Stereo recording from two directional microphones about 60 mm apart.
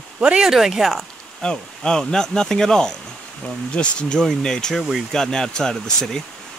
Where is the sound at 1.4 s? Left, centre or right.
Centre.